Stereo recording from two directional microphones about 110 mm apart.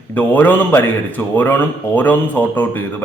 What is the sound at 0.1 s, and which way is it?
A man's voice, 15° left (ahead or behind).